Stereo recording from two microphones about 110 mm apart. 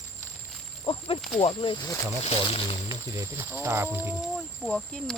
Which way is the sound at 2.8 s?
30° right (ahead or behind).